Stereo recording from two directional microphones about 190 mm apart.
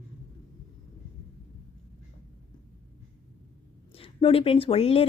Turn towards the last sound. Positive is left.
turn(degrees=30)  # may be behind; listen again after turning